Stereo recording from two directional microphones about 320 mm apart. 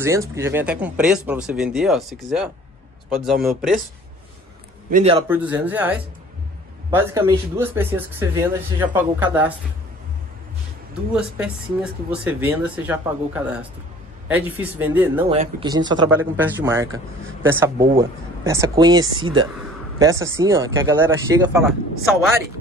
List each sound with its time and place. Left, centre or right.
0.0 s speech: centre
4.8 s a man's voice: right
5.3 s speech: centre
11.1 s speech: centre
15.2 s speech: centre